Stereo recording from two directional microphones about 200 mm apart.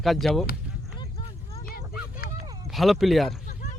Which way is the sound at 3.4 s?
50° left (ahead or behind).